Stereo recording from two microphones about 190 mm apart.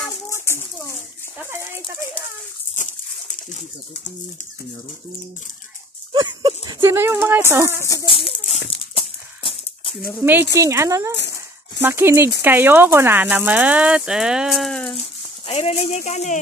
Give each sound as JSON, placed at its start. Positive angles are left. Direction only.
{"t": 0.3, "sound": "a sound", "side_deg": 15}
{"t": 2.7, "sound": "pigeon", "side_deg": 40}
{"t": 6.1, "sound": "speech", "side_deg": -25}
{"t": 7.8, "sound": "speech", "side_deg": 15}
{"t": 8.1, "sound": "a sound", "side_deg": 30}
{"t": 10.2, "sound": "speech", "side_deg": -10}
{"t": 11.1, "sound": "a sound", "side_deg": 65}
{"t": 11.8, "sound": "speech", "side_deg": -10}
{"t": 15.0, "sound": "speech", "side_deg": 35}